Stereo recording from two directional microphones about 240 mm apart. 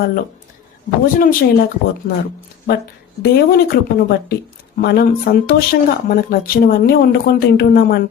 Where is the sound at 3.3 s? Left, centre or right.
Left.